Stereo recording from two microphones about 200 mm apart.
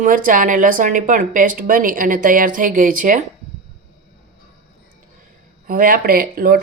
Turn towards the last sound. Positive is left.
turn(degrees=-50)  # may be behind; listen again after turning